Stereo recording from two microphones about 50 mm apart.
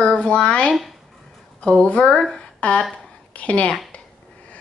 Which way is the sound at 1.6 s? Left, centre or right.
Centre.